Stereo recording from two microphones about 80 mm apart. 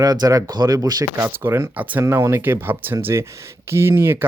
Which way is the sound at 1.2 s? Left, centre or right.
Right.